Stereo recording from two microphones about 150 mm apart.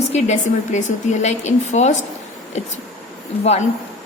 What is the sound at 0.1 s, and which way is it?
A woman's voice, 50° left (ahead or behind).